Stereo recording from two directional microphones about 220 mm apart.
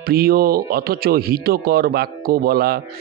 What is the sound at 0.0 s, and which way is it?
Speech, 45° right (ahead or behind).